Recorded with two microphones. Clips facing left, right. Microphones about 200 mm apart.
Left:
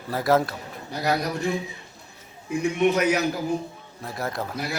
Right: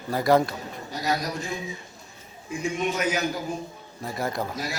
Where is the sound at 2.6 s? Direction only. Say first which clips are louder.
Left 5 dB; 60° left (ahead or behind).